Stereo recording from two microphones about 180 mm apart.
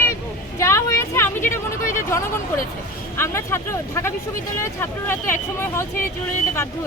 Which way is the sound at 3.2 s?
15° left (ahead or behind).